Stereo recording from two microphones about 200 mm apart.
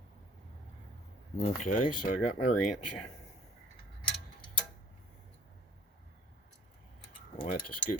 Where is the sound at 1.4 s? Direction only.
35° left (ahead or behind).